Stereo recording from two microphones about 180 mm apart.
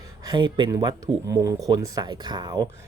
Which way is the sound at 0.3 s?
25° right (ahead or behind).